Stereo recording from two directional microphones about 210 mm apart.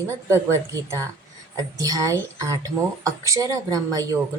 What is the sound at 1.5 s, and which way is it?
A woman's voice, 15° right (ahead or behind).